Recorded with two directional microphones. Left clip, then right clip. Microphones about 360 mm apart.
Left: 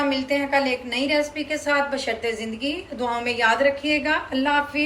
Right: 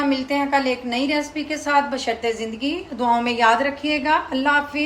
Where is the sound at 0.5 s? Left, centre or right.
Right.